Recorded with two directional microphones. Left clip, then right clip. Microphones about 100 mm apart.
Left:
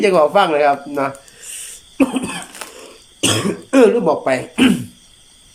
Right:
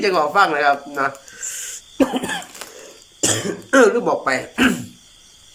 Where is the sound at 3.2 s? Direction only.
15° left (ahead or behind); by 4.7 s 30° left (ahead or behind).